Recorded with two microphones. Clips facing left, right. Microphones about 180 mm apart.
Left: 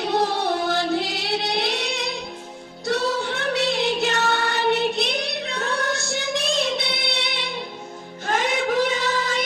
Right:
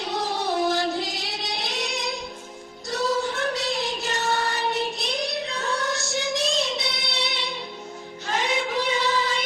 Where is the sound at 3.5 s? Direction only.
65° left (ahead or behind).